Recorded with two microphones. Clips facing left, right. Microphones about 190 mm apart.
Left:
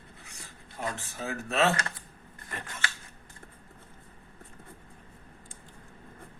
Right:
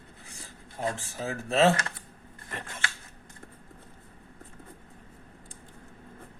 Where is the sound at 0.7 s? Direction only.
30° right (ahead or behind).